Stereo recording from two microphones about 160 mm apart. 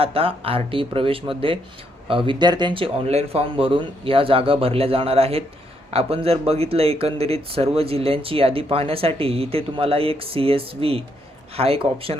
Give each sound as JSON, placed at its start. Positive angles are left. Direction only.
{"t": 0.0, "sound": "speech", "side_deg": -35}